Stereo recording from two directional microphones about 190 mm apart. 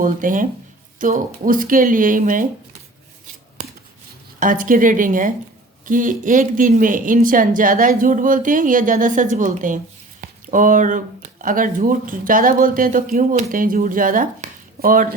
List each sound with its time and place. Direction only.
0.0 s a woman's voice: 45° right (ahead or behind)
4.4 s a woman's voice: 45° right (ahead or behind)